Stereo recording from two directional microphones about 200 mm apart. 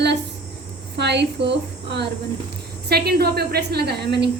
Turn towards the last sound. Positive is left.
turn(degrees=-55)  # may be behind; listen again after turning